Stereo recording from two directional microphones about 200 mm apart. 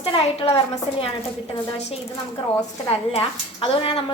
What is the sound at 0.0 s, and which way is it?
A woman's voice, 30° left (ahead or behind).